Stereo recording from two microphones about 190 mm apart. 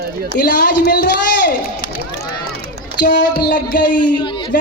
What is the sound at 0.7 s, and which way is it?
Speech, 60° left (ahead or behind).